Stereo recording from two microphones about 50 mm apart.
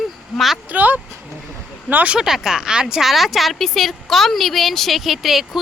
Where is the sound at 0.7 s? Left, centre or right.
Right.